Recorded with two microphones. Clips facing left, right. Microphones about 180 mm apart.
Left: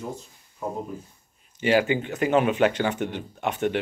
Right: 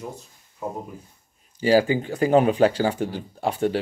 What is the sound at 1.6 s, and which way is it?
Speech, 35° right (ahead or behind).